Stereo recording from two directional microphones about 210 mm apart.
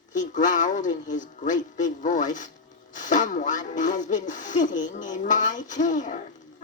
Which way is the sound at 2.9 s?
35° left (ahead or behind).